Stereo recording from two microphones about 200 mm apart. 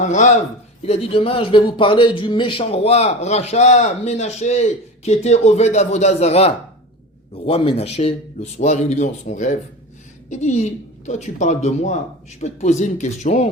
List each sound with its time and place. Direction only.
0.0 s speech: 35° left (ahead or behind)